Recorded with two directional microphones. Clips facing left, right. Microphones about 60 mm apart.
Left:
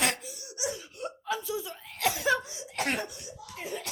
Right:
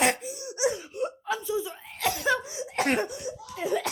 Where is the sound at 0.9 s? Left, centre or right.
Centre.